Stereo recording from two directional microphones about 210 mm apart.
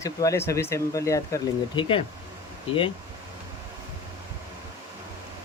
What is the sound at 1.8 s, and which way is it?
Speech, 25° left (ahead or behind).